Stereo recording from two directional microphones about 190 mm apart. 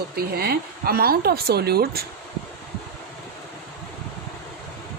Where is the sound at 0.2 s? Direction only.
55° right (ahead or behind).